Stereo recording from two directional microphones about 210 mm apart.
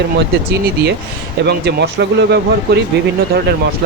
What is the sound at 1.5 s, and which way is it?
Speech, 55° right (ahead or behind).